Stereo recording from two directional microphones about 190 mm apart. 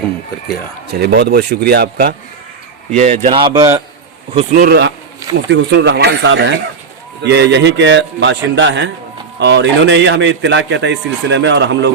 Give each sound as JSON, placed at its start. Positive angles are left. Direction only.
{"t": 0.9, "sound": "speech", "side_deg": -55}
{"t": 2.9, "sound": "speech", "side_deg": -35}
{"t": 3.2, "sound": "speech", "side_deg": -25}
{"t": 4.5, "sound": "speech", "side_deg": -55}
{"t": 5.5, "sound": "a man's voice", "side_deg": -70}